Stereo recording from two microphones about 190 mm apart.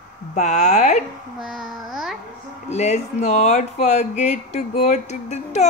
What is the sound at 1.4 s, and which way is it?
Babbling, centre (ahead or behind).